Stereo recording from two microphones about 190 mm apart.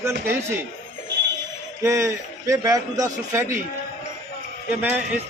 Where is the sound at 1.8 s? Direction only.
15° right (ahead or behind).